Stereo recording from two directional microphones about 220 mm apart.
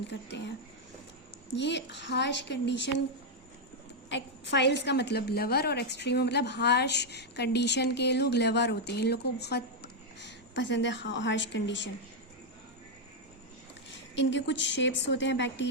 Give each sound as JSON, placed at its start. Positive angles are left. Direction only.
{"t": 0.1, "sound": "a woman's voice", "side_deg": 50}
{"t": 1.5, "sound": "a woman's voice", "side_deg": 50}
{"t": 4.1, "sound": "a woman's voice", "side_deg": 50}
{"t": 14.2, "sound": "a woman's voice", "side_deg": 55}